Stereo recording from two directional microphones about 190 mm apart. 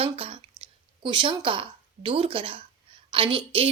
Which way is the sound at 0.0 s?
30° right (ahead or behind).